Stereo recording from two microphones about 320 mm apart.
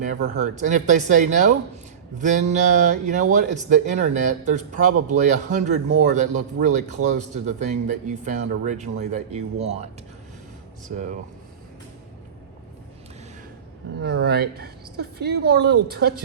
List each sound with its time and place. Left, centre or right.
0.0 s a man's voice: right
14.0 s a man's voice: right